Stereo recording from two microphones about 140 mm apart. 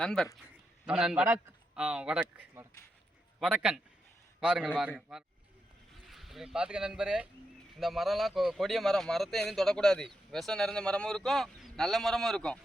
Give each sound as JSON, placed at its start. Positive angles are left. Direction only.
{"t": 0.0, "sound": "speech", "side_deg": 0}
{"t": 1.2, "sound": "a man's voice", "side_deg": -20}
{"t": 1.7, "sound": "a man's voice", "side_deg": -5}